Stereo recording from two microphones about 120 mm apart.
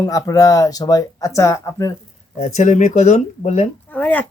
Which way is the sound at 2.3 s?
80° left.